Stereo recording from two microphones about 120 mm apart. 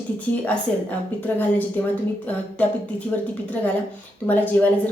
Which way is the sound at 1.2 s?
15° left (ahead or behind).